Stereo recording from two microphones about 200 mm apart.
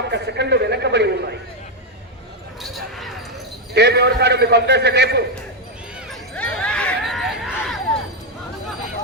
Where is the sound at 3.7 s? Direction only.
55° right (ahead or behind).